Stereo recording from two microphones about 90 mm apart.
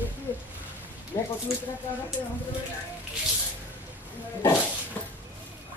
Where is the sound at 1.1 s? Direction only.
40° left (ahead or behind).